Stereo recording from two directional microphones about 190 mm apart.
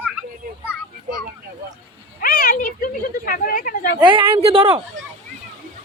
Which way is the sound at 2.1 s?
50° left (ahead or behind).